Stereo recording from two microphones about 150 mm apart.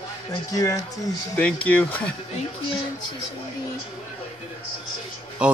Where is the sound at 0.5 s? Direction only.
25° left (ahead or behind).